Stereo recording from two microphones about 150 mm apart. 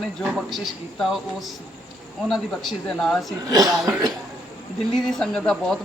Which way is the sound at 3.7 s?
5° right (ahead or behind).